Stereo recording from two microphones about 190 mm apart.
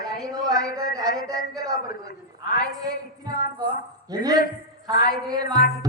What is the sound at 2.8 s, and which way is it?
Speech, 20° right (ahead or behind).